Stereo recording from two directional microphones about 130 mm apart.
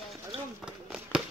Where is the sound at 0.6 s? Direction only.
5° right (ahead or behind).